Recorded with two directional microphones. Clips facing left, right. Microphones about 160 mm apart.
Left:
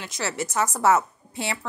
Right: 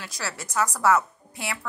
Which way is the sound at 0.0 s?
25° left (ahead or behind).